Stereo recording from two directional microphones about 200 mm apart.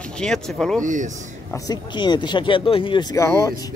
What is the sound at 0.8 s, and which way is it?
Speech, 40° right (ahead or behind).